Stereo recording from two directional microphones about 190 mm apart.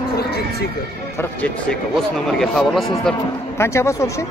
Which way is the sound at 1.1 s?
5° left (ahead or behind).